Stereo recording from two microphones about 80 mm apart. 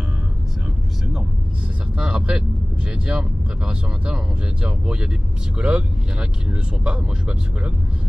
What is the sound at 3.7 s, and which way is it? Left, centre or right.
Speech, centre.